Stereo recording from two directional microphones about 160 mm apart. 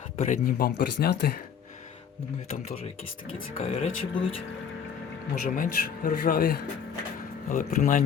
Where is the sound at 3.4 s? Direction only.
50° left (ahead or behind).